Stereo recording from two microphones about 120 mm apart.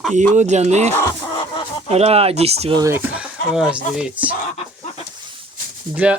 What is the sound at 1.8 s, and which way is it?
Speech, 60° right (ahead or behind).